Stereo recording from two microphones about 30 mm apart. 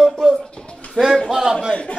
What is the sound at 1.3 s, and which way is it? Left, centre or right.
Speech, centre.